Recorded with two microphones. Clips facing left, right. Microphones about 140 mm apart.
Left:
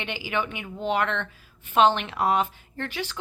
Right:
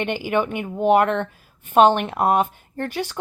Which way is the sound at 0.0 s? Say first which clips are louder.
Right 7 dB; 50° right (ahead or behind).